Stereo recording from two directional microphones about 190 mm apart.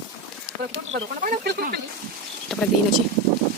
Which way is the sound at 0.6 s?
60° right (ahead or behind).